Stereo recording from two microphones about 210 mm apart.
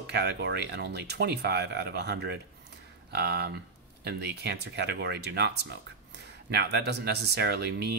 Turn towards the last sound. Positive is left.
turn(degrees=-50)  # may be behind; listen again after turning